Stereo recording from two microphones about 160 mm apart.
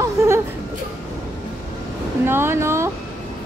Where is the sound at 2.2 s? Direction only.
15° right (ahead or behind).